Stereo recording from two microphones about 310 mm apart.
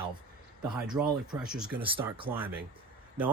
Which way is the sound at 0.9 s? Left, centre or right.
Centre.